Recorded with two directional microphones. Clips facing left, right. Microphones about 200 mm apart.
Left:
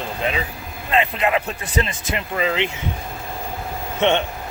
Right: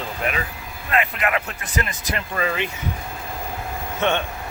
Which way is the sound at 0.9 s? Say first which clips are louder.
Left 3 dB; 25° left (ahead or behind).